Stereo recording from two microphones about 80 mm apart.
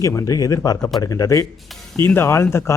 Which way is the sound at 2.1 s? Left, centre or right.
Left.